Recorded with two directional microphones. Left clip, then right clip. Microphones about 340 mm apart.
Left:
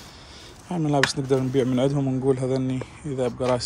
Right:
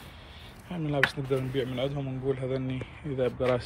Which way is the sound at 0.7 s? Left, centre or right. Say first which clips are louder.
Left 5 dB; centre.